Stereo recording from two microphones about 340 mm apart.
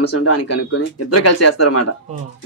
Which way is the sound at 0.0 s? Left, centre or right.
Left.